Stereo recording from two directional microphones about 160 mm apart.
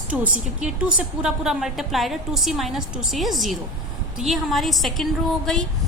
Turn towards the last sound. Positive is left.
turn(degrees=0)  # may be behind; listen again after turning